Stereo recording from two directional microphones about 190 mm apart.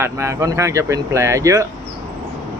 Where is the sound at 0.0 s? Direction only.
15° right (ahead or behind).